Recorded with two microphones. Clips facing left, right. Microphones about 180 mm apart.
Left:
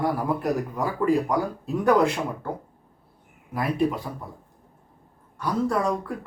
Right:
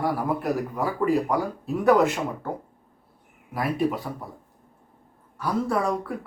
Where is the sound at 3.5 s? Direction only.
5° right (ahead or behind).